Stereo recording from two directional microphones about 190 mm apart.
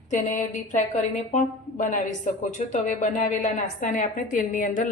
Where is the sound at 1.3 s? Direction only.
40° left (ahead or behind).